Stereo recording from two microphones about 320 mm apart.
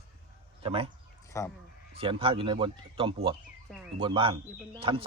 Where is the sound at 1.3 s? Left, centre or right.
Centre.